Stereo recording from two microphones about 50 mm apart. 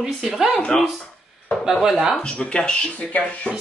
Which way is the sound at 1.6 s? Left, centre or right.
Centre.